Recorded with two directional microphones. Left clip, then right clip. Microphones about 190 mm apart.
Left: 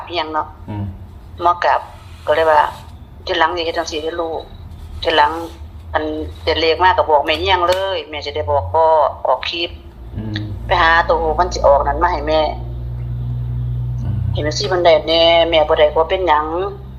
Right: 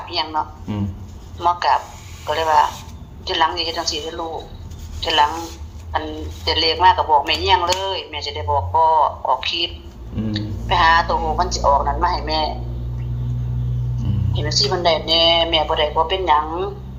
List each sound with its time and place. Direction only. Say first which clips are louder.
0.1 s a woman's voice: left 2 dB; 25° left (ahead or behind)
14.3 s a woman's voice: left 2 dB; 25° left (ahead or behind)